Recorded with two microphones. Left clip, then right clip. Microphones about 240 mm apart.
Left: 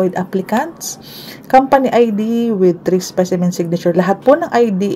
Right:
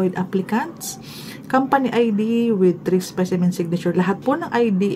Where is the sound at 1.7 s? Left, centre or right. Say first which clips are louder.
Left 7 dB; centre.